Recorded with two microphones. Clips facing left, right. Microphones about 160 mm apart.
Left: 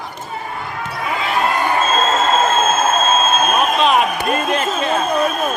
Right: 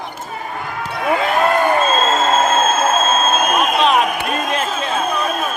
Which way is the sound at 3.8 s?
Centre (ahead or behind).